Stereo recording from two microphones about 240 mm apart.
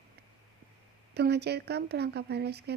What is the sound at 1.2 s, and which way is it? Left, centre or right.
A woman's voice, right.